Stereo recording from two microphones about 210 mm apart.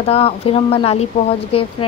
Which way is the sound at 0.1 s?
30° left (ahead or behind).